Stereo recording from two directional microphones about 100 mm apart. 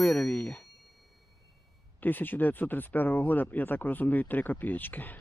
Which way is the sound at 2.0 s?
20° left (ahead or behind).